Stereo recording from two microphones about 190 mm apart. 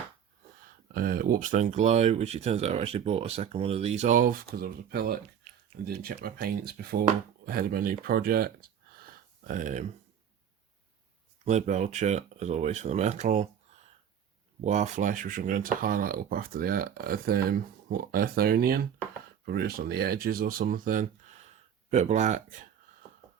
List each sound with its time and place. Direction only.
0.6 s speech: 50° right (ahead or behind)
11.4 s speech: 40° right (ahead or behind)